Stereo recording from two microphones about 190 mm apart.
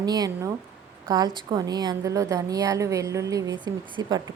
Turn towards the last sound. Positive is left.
turn(degrees=-25)  # may be behind; listen again after turning